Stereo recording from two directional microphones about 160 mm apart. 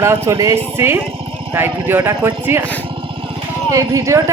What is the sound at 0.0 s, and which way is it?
Speech, 15° right (ahead or behind).